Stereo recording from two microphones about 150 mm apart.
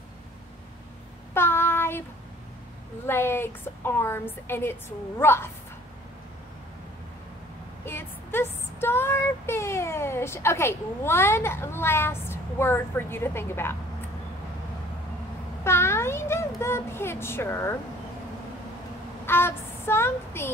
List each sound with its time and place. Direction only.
1.3 s child singing: 15° left (ahead or behind)
3.1 s a woman's voice: 15° left (ahead or behind)
7.8 s child singing: 15° left (ahead or behind)
15.6 s speech: 15° left (ahead or behind)
19.2 s speech: 15° left (ahead or behind)